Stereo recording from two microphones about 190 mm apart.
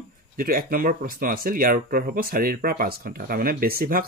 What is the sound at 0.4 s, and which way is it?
Speech, 50° right (ahead or behind).